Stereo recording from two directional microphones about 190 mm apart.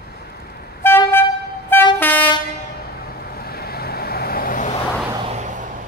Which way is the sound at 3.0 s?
55° left (ahead or behind).